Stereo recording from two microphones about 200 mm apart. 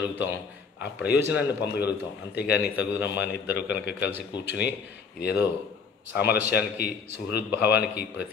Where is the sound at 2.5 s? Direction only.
10° right (ahead or behind).